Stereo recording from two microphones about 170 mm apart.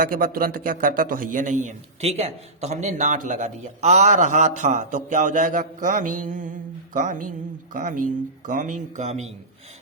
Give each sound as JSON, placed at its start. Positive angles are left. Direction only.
{"t": 0.0, "sound": "speech", "side_deg": -55}